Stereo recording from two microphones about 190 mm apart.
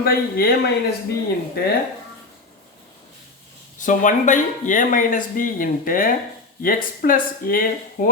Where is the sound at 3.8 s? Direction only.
45° left (ahead or behind).